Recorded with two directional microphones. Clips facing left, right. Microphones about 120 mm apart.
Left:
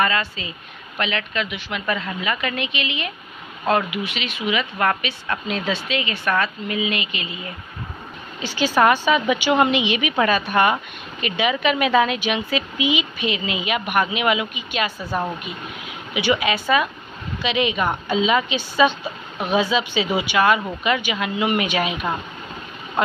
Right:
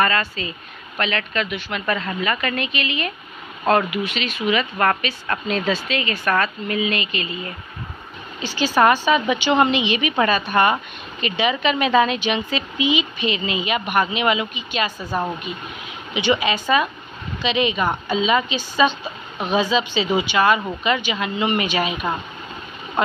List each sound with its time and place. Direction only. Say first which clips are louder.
0.0 s speech: right 1 dB; 15° left (ahead or behind)
8.4 s speech: even; 15° left (ahead or behind)
15.0 s speech: right 1 dB; 15° right (ahead or behind)
16.1 s speech: right 1 dB; 10° left (ahead or behind)